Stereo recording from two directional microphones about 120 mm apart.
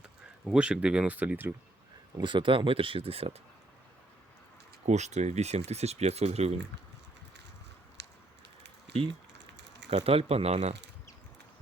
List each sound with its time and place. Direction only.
0.5 s speech: 10° right (ahead or behind)
2.2 s speech: 45° right (ahead or behind)
4.9 s speech: 70° right (ahead or behind)
9.9 s speech: 55° right (ahead or behind)